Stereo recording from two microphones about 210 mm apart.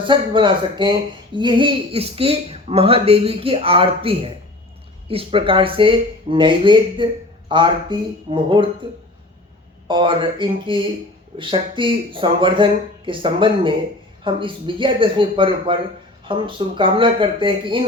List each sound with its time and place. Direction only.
0.0 s speech: 25° right (ahead or behind)
9.8 s speech: 25° right (ahead or behind)